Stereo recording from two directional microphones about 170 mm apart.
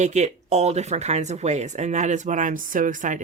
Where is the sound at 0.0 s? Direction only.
40° right (ahead or behind).